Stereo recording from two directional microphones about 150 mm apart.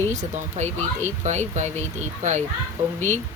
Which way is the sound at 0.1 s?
50° right (ahead or behind).